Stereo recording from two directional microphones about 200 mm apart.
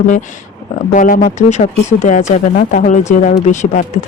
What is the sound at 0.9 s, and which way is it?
Speech, 40° left (ahead or behind).